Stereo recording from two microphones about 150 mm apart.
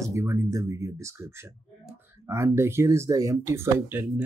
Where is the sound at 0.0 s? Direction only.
20° right (ahead or behind).